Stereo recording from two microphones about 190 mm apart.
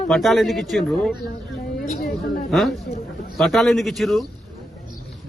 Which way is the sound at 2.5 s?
Centre (ahead or behind).